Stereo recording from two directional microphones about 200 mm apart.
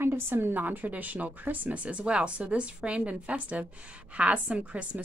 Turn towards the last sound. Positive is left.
turn(degrees=-5)  # may be behind; listen again after turning